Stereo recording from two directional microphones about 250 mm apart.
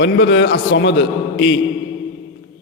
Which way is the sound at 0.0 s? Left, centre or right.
Left.